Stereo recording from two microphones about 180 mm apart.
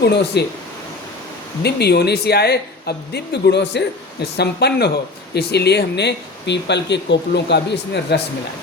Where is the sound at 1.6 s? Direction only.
65° left (ahead or behind).